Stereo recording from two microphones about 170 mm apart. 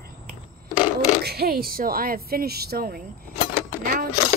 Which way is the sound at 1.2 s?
70° right (ahead or behind).